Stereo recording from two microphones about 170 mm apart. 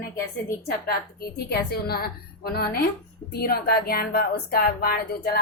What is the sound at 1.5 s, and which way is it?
Speech, 65° left (ahead or behind).